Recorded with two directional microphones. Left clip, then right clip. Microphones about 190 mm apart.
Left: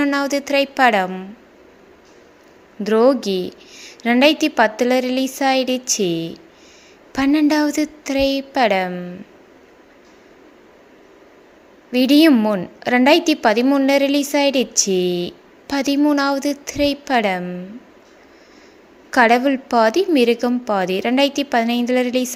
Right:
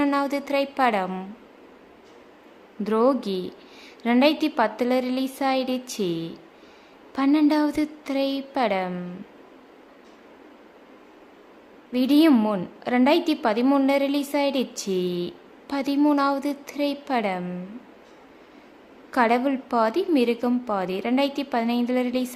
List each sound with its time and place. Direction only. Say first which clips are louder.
0.0 s a woman's voice: left 5 dB; 10° left (ahead or behind)
2.8 s a woman's voice: left 7 dB; 15° left (ahead or behind)
11.9 s a woman's voice: left 6 dB; 15° left (ahead or behind)
19.1 s a woman's voice: left 7 dB; 15° left (ahead or behind)